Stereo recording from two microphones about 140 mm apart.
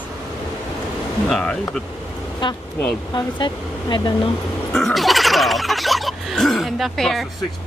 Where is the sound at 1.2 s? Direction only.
Centre (ahead or behind).